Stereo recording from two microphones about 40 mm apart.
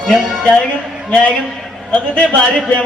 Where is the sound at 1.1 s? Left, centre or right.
Left.